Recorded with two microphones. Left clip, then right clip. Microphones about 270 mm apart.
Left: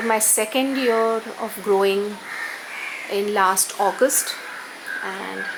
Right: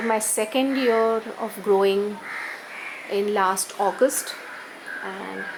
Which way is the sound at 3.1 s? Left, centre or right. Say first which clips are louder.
Left 2 dB; centre.